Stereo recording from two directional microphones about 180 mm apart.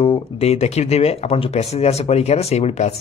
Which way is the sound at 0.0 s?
35° left (ahead or behind).